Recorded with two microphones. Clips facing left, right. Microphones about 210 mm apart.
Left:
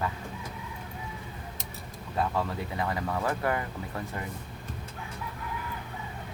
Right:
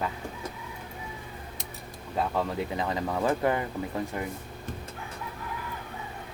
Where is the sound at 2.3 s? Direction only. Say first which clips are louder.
Right 2 dB; 20° right (ahead or behind).